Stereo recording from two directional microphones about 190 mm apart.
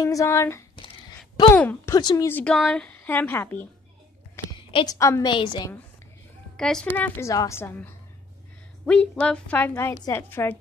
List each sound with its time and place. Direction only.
0.0 s a woman's voice: 15° left (ahead or behind)
0.7 s a sound: 25° left (ahead or behind)
1.5 s a woman's voice: 10° left (ahead or behind)
4.6 s a sound: 25° left (ahead or behind)
4.9 s a woman's voice: 15° left (ahead or behind)
6.5 s a woman's voice: 5° left (ahead or behind)